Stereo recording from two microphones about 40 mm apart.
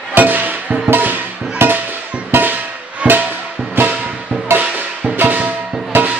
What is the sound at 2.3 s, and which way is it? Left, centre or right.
Music, right.